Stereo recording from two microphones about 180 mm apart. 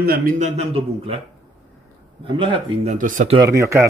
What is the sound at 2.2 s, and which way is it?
Speech, 30° right (ahead or behind).